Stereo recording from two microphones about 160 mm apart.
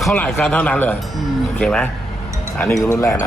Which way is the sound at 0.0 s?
5° left (ahead or behind).